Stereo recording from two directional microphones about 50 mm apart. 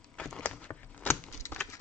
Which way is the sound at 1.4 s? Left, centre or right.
Left.